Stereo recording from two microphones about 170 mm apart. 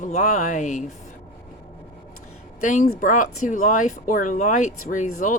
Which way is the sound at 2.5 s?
50° left (ahead or behind).